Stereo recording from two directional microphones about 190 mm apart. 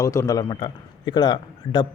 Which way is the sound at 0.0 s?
15° left (ahead or behind).